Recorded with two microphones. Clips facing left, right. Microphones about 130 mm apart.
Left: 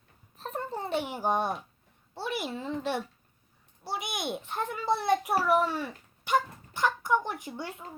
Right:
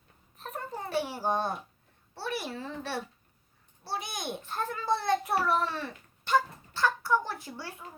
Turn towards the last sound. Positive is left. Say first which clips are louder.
# left 3 dB
turn(degrees=20)  # may be behind; listen again after turning